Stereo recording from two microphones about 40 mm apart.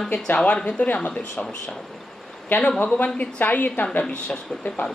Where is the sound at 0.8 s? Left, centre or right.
Left.